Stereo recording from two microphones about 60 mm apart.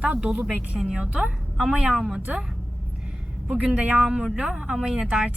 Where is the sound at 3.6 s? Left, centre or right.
Right.